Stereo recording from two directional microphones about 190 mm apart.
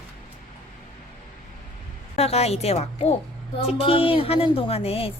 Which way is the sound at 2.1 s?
35° left (ahead or behind).